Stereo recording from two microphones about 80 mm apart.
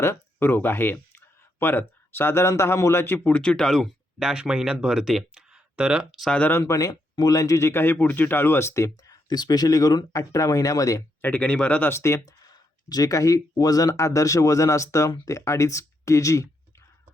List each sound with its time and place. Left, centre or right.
0.0 s speech: left
3.3 s speech: centre
3.7 s speech: centre
6.7 s speech: left
9.3 s speech: left
11.2 s speech: centre
11.9 s speech: left
12.9 s speech: left